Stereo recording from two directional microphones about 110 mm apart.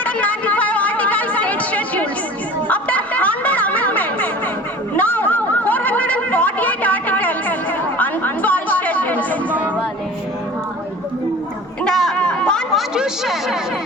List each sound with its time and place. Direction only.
0.0 s chatter: 15° left (ahead or behind)
2.6 s music: 15° left (ahead or behind)
4.9 s snicker: 15° left (ahead or behind)
7.9 s chatter: 15° left (ahead or behind)
11.9 s chatter: 5° left (ahead or behind)
12.9 s chatter: 5° right (ahead or behind)